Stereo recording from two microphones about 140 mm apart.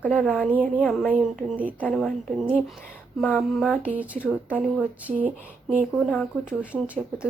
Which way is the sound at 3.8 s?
10° right (ahead or behind).